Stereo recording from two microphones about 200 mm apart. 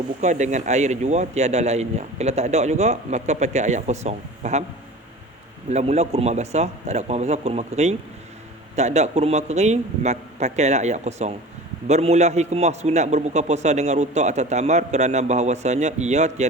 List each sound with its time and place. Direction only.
0.2 s a man's voice: 35° right (ahead or behind)
5.6 s a man's voice: 35° right (ahead or behind)